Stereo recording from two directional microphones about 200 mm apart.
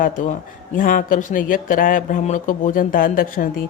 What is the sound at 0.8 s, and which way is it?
Speech, 45° left (ahead or behind).